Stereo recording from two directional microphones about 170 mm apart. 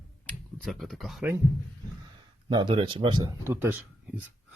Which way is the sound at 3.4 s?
15° right (ahead or behind).